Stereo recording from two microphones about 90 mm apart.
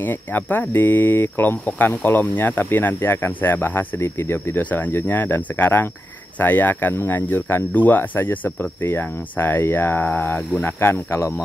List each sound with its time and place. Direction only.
0.0 s speech: 20° left (ahead or behind)